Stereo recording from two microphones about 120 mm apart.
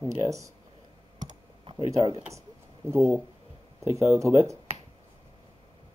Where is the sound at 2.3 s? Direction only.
20° right (ahead or behind).